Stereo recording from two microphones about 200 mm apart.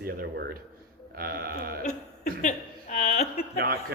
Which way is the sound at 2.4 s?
35° left (ahead or behind).